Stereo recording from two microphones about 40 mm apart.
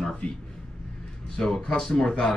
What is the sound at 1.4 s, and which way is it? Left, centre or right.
Speech, centre.